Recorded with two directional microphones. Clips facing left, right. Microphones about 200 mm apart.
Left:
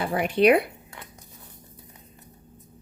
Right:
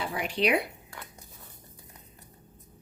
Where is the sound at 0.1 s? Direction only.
55° left (ahead or behind).